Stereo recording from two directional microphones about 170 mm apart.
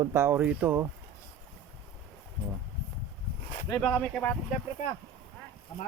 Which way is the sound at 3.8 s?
5° left (ahead or behind).